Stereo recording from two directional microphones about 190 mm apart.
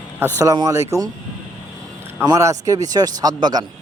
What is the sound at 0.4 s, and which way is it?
Speech, 15° right (ahead or behind).